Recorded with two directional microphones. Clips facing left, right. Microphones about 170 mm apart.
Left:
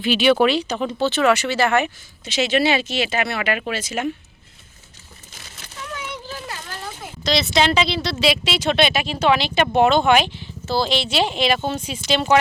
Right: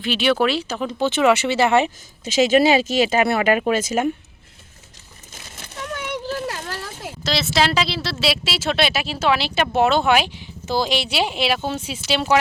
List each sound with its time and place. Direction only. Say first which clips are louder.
0.0 s speech: left 3 dB; centre (ahead or behind)
0.9 s speech: right 1 dB; 15° right (ahead or behind)
2.2 s speech: right 4 dB; 40° right (ahead or behind)
6.3 s a sound: right 6 dB; 60° right (ahead or behind)
7.3 s speech: left 2 dB; 5° right (ahead or behind)